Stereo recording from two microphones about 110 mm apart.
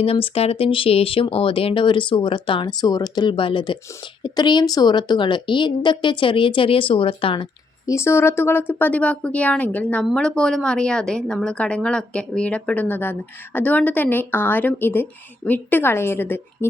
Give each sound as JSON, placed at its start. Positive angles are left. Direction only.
{"t": 0.0, "sound": "speech", "side_deg": 60}
{"t": 7.9, "sound": "a woman's voice", "side_deg": 25}